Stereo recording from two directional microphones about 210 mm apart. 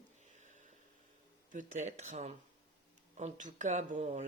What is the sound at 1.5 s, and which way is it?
A man's voice, 35° right (ahead or behind).